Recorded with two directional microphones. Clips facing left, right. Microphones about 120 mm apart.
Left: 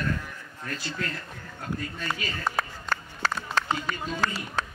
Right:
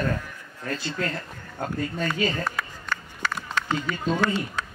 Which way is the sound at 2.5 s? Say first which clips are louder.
Left 2 dB; 35° left (ahead or behind).